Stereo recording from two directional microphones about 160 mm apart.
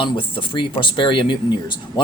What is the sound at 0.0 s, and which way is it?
Speech, 30° left (ahead or behind).